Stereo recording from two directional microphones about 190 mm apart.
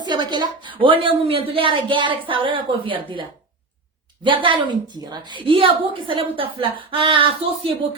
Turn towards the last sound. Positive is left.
turn(degrees=-30)  # may be behind; listen again after turning